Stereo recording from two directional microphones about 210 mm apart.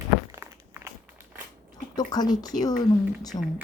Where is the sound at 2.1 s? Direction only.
20° left (ahead or behind).